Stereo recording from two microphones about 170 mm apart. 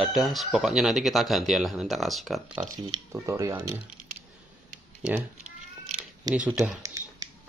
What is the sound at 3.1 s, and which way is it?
Speech, 15° right (ahead or behind).